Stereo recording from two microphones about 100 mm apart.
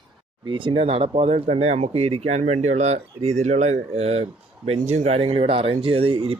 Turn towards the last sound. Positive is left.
turn(degrees=-65)  # may be behind; listen again after turning